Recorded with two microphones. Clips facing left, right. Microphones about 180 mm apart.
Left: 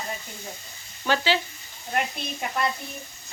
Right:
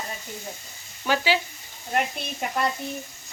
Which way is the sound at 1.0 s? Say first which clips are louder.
Even; 10° right (ahead or behind).